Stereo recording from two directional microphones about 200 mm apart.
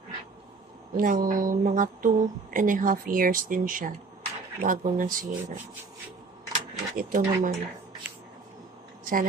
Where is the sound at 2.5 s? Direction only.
40° right (ahead or behind).